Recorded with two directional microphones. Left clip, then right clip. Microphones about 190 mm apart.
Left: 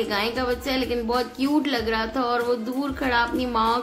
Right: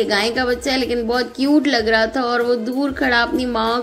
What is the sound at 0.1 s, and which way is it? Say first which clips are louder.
A woman's voice: right 6 dB; 20° right (ahead or behind).